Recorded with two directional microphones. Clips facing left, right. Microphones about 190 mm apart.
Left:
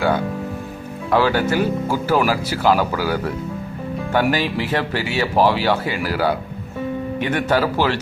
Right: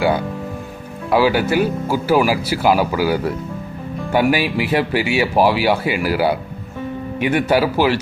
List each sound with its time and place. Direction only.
1.1 s speech: 10° right (ahead or behind)